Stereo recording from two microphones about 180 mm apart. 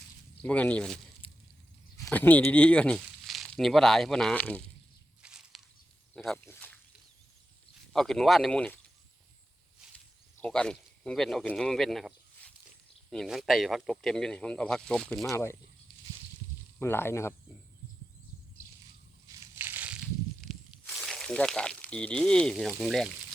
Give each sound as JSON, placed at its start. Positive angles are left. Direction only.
{"t": 0.4, "sound": "speech", "side_deg": 5}
{"t": 1.2, "sound": "chop", "side_deg": 30}
{"t": 2.0, "sound": "speech", "side_deg": 10}
{"t": 5.2, "sound": "walk", "side_deg": -5}
{"t": 6.1, "sound": "a sound", "side_deg": 5}
{"t": 7.9, "sound": "speech", "side_deg": 0}
{"t": 10.4, "sound": "speech", "side_deg": 5}
{"t": 16.8, "sound": "speech", "side_deg": 15}
{"t": 19.4, "sound": "crushing", "side_deg": -10}
{"t": 20.4, "sound": "speech", "side_deg": 0}